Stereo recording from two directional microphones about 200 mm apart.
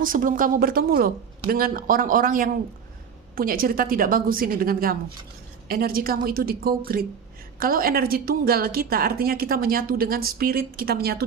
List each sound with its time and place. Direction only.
0.0 s a woman's voice: 45° right (ahead or behind)